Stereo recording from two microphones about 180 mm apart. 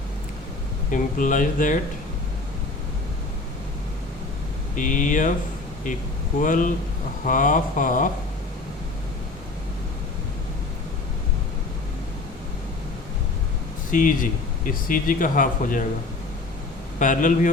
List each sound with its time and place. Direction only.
0.9 s speech: 45° left (ahead or behind)
4.7 s speech: 45° left (ahead or behind)
6.4 s speech: 45° left (ahead or behind)
13.9 s speech: 45° left (ahead or behind)
17.0 s speech: 45° left (ahead or behind)